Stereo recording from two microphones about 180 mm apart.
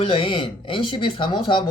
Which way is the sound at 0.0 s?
30° left (ahead or behind).